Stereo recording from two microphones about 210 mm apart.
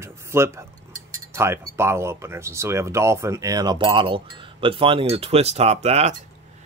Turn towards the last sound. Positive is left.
turn(degrees=-30)  # may be behind; listen again after turning